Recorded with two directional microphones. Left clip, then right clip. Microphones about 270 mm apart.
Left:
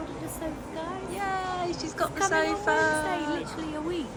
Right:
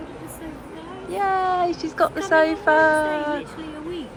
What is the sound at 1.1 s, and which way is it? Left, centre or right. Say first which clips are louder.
Speech: right 11 dB; centre.